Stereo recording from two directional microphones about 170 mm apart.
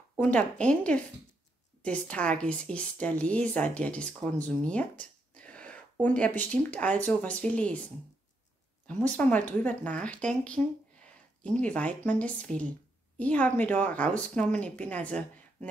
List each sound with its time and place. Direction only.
0.2 s a woman's voice: 5° left (ahead or behind)
9.1 s a woman's voice: 10° left (ahead or behind)